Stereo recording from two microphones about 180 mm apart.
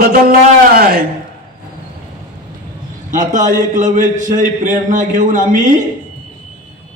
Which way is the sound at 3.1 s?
45° right (ahead or behind).